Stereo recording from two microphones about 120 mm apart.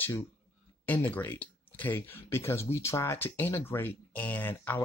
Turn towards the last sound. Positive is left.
turn(degrees=15)  # may be behind; listen again after turning